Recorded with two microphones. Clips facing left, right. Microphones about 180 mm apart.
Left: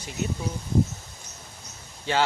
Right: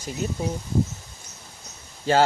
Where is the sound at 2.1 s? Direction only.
40° right (ahead or behind).